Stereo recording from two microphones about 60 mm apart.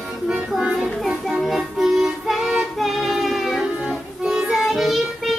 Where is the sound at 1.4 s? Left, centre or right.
Centre.